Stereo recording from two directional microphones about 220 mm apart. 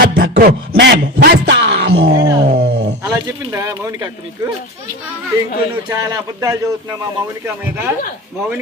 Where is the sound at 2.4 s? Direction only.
45° right (ahead or behind).